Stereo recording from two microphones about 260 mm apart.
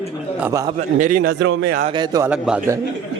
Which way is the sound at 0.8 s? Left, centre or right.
Right.